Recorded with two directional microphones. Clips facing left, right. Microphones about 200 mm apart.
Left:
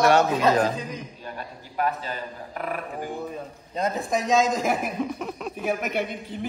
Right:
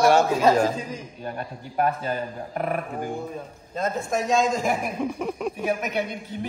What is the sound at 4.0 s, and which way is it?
Speech, centre (ahead or behind).